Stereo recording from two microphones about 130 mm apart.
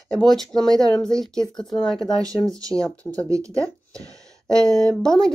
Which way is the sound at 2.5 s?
25° right (ahead or behind).